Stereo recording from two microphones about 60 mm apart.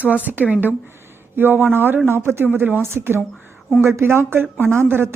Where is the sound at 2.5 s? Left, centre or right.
Right.